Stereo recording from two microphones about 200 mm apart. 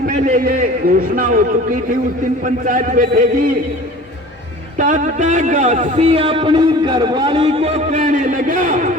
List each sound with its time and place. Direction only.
0.0 s a sound: 45° right (ahead or behind)
1.1 s a man's voice: 45° right (ahead or behind)
4.8 s a man's voice: 40° right (ahead or behind)